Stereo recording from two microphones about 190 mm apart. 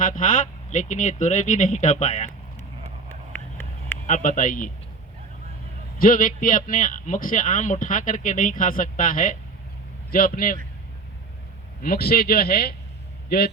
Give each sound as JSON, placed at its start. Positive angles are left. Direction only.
{"t": 0.0, "sound": "speech", "side_deg": 45}
{"t": 4.0, "sound": "a man's voice", "side_deg": 45}
{"t": 6.0, "sound": "a man's voice", "side_deg": 45}
{"t": 11.8, "sound": "speech", "side_deg": 55}